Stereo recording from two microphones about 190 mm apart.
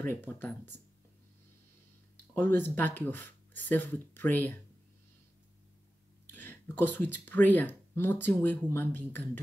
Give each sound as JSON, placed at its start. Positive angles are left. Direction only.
{"t": 0.0, "sound": "speech", "side_deg": 10}
{"t": 2.3, "sound": "speech", "side_deg": 10}
{"t": 6.2, "sound": "speech", "side_deg": 10}